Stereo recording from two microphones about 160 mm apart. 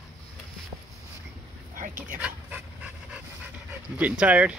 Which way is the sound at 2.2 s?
10° right (ahead or behind).